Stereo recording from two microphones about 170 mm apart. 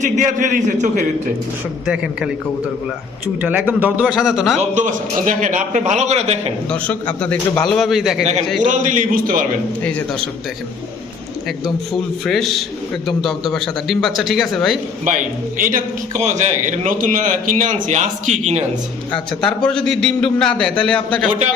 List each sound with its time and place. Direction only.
0.0 s a man's voice: 45° right (ahead or behind)
3.4 s a man's voice: 10° right (ahead or behind)
4.7 s a man's voice: 50° right (ahead or behind)
6.7 s a man's voice: 5° left (ahead or behind)
7.5 s a man's voice: 25° left (ahead or behind)
7.8 s a man's voice: centre (ahead or behind)
8.6 s a man's voice: 50° right (ahead or behind)
12.2 s a man's voice: centre (ahead or behind)
15.0 s a man's voice: 50° right (ahead or behind)
19.1 s a man's voice: 5° left (ahead or behind)